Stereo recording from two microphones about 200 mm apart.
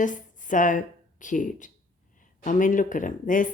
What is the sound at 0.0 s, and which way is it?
A woman's voice, 40° left (ahead or behind).